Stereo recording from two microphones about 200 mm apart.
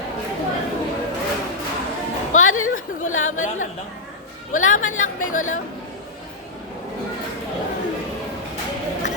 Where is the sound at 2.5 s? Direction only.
90° left.